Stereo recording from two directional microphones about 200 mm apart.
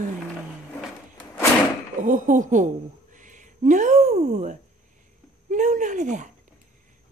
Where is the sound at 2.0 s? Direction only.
40° right (ahead or behind).